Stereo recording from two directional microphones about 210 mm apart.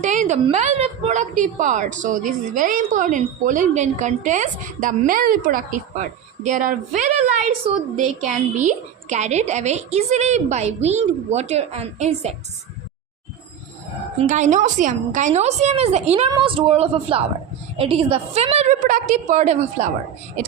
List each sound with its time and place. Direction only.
0.0 s a woman's voice: 35° right (ahead or behind)
14.2 s a woman's voice: 35° right (ahead or behind)